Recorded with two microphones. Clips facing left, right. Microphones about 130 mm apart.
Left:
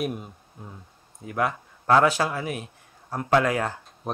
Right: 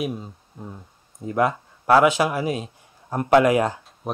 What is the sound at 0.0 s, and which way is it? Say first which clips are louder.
Speech: right 2 dB; centre (ahead or behind).